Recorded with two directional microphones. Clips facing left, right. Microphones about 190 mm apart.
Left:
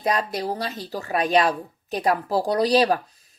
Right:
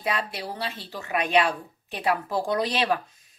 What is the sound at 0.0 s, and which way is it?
A child's voice, 40° left (ahead or behind).